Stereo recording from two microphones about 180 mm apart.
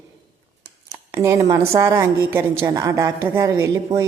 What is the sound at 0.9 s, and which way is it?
A woman's voice, 15° right (ahead or behind).